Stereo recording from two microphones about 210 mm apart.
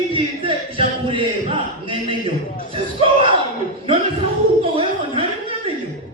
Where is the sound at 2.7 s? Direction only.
25° right (ahead or behind).